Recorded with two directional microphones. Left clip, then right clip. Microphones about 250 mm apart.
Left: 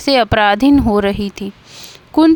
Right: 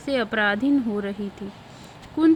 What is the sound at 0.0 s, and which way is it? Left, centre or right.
Speech, left.